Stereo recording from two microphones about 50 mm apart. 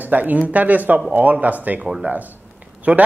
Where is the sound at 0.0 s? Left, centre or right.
Right.